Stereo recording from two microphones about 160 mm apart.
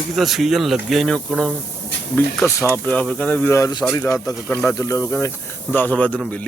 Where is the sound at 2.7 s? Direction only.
10° left (ahead or behind).